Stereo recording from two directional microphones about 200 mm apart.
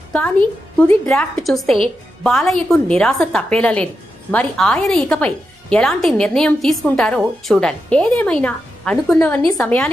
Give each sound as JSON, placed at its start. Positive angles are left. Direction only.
{"t": 0.1, "sound": "a woman's voice", "side_deg": 5}